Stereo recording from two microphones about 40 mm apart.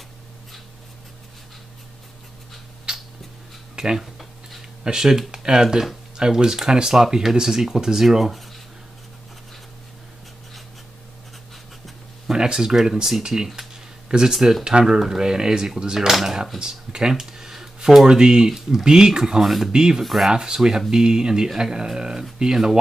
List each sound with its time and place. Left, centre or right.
2.9 s a sound: right
4.0 s a sound: centre
4.6 s a sound: centre
5.3 s speech: centre
12.3 s speech: centre
16.1 s speech: centre
16.5 s speech: right
17.1 s a sound: centre
17.7 s speech: centre
18.5 s speech: centre
18.9 s speech: centre
19.4 s speech: centre
19.7 s speech: centre